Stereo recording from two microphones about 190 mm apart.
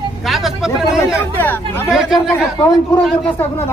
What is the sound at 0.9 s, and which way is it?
Speech, 10° left (ahead or behind).